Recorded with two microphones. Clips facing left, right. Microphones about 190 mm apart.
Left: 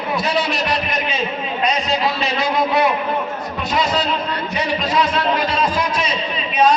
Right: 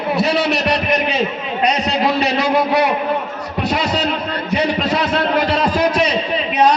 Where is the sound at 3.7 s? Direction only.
65° right (ahead or behind).